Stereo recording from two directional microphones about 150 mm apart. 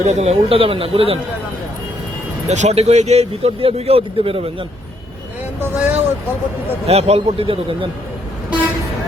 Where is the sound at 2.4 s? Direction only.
50° right (ahead or behind).